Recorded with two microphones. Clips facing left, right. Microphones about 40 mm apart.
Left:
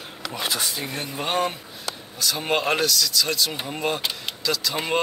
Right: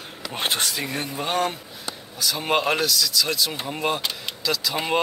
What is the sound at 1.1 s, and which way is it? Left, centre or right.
Speech, centre.